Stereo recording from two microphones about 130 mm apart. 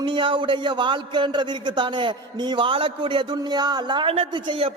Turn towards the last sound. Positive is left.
turn(degrees=-40)  # may be behind; listen again after turning